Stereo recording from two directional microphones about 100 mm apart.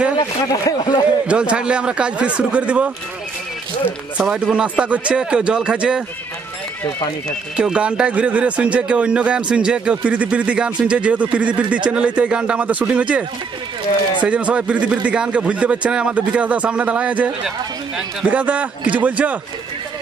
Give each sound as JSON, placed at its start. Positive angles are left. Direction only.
{"t": 0.5, "sound": "speech", "side_deg": 40}
{"t": 1.2, "sound": "a man's voice", "side_deg": -10}
{"t": 4.2, "sound": "a man's voice", "side_deg": -5}
{"t": 7.5, "sound": "a man's voice", "side_deg": -10}
{"t": 14.2, "sound": "a man's voice", "side_deg": -15}